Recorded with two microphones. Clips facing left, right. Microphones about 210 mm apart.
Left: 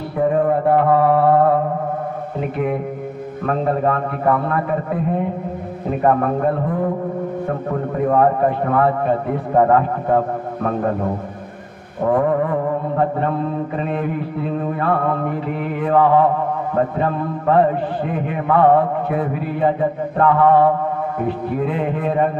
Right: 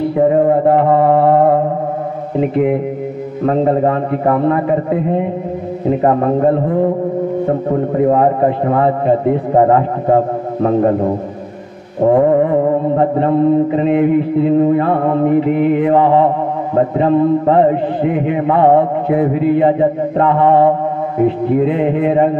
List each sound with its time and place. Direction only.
0.1 s mantra: 20° right (ahead or behind)
8.0 s mantra: 20° right (ahead or behind)